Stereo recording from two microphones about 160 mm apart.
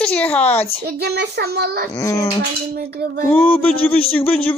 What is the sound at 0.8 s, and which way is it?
A child's voice, 85° right.